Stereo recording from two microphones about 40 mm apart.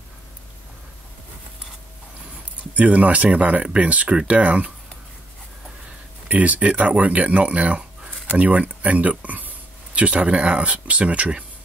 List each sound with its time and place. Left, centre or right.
2.7 s speech: right
6.2 s speech: right